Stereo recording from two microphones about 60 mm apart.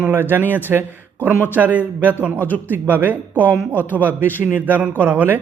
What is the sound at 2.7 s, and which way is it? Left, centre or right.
Speech, right.